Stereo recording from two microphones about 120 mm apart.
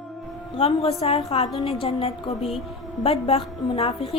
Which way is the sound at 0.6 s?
55° left (ahead or behind).